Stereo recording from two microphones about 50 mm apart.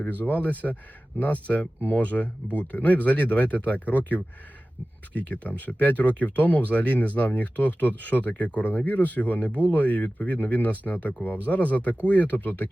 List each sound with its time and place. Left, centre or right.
0.1 s speech: left